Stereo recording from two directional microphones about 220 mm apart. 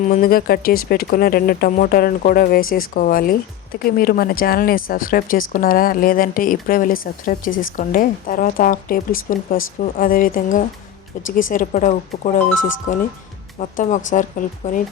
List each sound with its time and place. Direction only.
0.0 s a woman's voice: 40° left (ahead or behind)